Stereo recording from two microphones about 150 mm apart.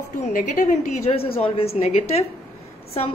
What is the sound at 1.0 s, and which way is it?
A woman's voice, 40° left (ahead or behind).